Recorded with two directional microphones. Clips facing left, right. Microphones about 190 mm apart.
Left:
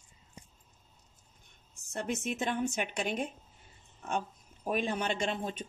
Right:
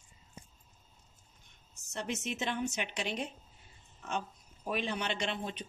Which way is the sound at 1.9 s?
50° left (ahead or behind).